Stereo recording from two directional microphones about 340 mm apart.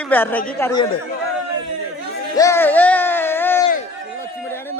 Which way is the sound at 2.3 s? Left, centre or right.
Centre.